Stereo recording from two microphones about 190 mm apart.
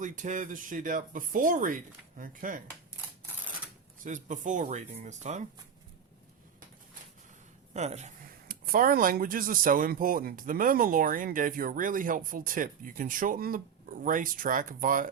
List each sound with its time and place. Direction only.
0.0 s speech: 40° right (ahead or behind)
4.0 s speech: 40° right (ahead or behind)
7.7 s speech: 35° right (ahead or behind)